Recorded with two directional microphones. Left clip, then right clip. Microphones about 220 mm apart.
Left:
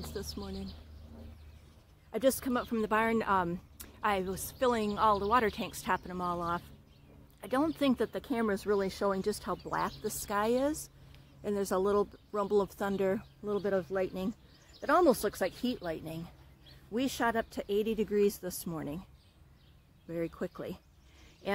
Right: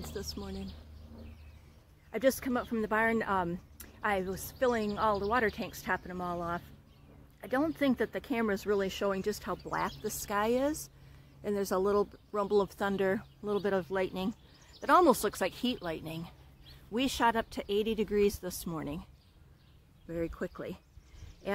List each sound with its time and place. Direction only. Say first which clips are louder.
0.0 s speech: even; 5° left (ahead or behind)
2.0 s speech: even; 5° left (ahead or behind)
4.5 s speech: even; 15° left (ahead or behind)
5.9 s speech: left 2 dB; 5° left (ahead or behind)
7.3 s speech: even; 15° left (ahead or behind)
7.9 s speech: even; centre (ahead or behind)
20.1 s speech: even; 5° left (ahead or behind)